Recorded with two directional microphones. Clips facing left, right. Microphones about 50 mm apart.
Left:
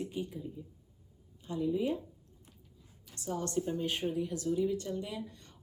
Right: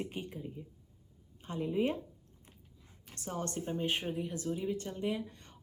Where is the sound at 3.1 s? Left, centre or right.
Right.